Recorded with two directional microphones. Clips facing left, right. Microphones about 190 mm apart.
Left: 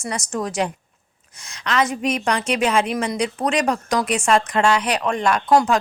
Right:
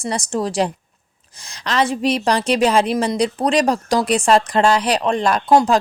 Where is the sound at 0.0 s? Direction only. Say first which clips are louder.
Right 4 dB; 30° right (ahead or behind).